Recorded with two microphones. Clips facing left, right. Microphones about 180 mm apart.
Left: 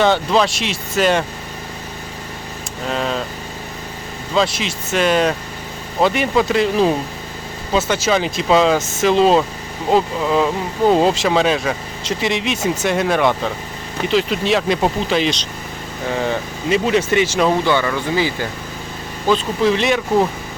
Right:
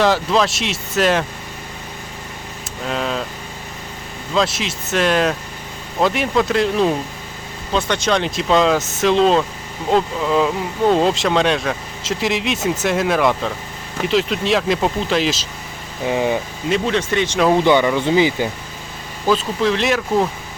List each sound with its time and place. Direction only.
0.0 s speech: centre (ahead or behind)
2.8 s speech: centre (ahead or behind)
4.4 s speech: centre (ahead or behind)
16.0 s speech: 15° right (ahead or behind)
16.6 s speech: 5° left (ahead or behind)
17.6 s speech: 20° right (ahead or behind)
19.3 s speech: centre (ahead or behind)